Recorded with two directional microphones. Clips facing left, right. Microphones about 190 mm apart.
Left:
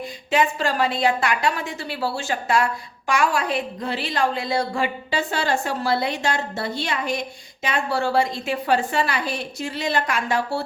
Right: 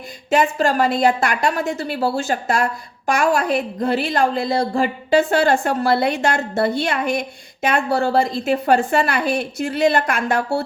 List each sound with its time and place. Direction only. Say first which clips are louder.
0.3 s a woman's voice: right 4 dB; 45° right (ahead or behind)
5.1 s a woman's voice: right 10 dB; 55° right (ahead or behind)